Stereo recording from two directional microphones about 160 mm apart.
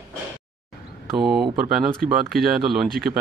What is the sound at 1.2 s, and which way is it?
Speech, 5° right (ahead or behind).